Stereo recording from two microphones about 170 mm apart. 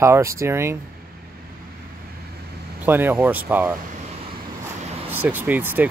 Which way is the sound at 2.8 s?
10° right (ahead or behind).